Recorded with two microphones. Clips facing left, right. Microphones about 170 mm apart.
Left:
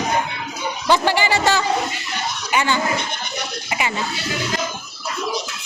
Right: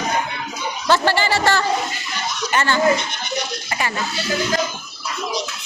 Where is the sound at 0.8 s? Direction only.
15° left (ahead or behind).